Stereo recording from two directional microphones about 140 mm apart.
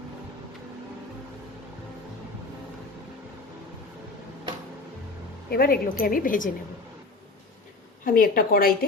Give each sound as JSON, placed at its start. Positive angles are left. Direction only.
{"t": 5.5, "sound": "a woman's voice", "side_deg": 90}
{"t": 8.0, "sound": "a woman's voice", "side_deg": 85}